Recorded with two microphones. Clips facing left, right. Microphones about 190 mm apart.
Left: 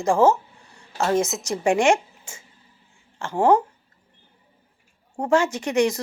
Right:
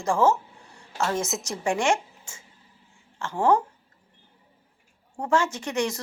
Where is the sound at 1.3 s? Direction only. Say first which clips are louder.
Even; centre (ahead or behind).